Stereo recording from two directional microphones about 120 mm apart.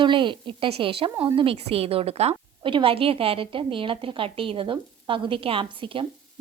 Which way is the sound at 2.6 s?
45° right (ahead or behind).